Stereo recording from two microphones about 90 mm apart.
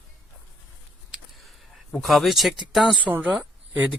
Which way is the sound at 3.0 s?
15° right (ahead or behind).